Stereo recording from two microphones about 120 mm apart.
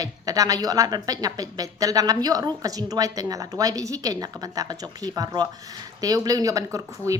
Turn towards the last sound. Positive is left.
turn(degrees=-30)  # may be behind; listen again after turning